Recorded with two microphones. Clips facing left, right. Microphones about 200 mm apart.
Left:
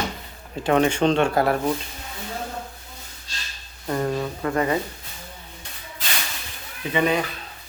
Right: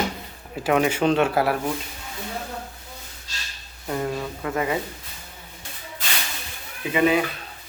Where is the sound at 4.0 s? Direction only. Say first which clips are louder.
Left 3 dB; 5° right (ahead or behind).